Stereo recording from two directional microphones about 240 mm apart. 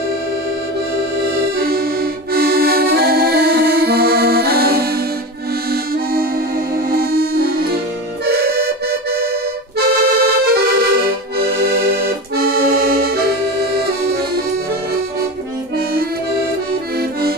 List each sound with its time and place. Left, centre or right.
2.3 s accordion: right
6.9 s music: right
8.3 s accordion: right
9.8 s accordion: right